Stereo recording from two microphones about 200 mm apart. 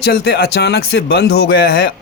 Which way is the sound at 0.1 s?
50° left (ahead or behind).